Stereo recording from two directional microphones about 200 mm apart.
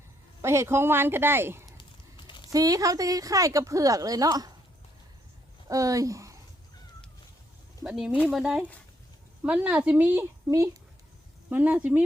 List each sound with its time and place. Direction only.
0.4 s a woman's voice: 15° right (ahead or behind)
1.8 s a sound: 25° left (ahead or behind)
2.5 s a woman's voice: 15° right (ahead or behind)
5.6 s a woman's voice: 15° right (ahead or behind)
7.9 s a woman's voice: 5° right (ahead or behind)